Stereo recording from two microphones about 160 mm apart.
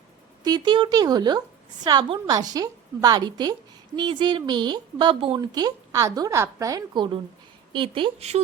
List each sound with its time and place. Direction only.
0.4 s a woman's voice: 25° right (ahead or behind)